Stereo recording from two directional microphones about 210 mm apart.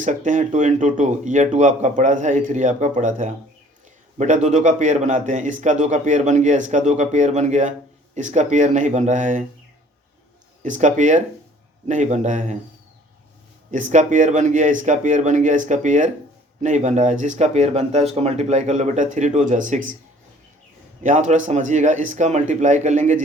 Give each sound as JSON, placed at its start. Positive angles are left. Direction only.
{"t": 0.0, "sound": "a man's voice", "side_deg": -35}
{"t": 10.6, "sound": "a man's voice", "side_deg": -35}
{"t": 13.7, "sound": "a man's voice", "side_deg": -35}
{"t": 21.0, "sound": "a man's voice", "side_deg": -35}